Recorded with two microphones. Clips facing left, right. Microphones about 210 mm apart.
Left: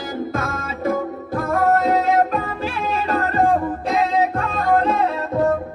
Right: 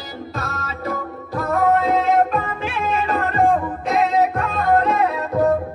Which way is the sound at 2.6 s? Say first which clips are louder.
Right 1 dB; 35° left (ahead or behind).